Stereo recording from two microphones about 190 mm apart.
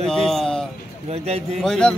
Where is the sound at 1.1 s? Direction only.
35° right (ahead or behind).